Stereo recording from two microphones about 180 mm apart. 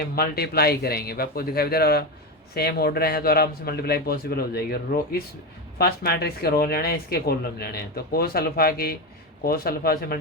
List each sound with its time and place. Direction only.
0.0 s speech: 60° left (ahead or behind)